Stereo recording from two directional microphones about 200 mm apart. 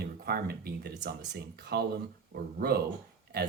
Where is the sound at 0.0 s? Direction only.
50° right (ahead or behind).